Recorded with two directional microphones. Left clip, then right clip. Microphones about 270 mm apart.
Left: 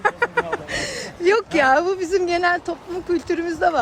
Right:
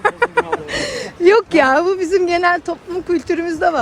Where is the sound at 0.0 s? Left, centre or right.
Centre.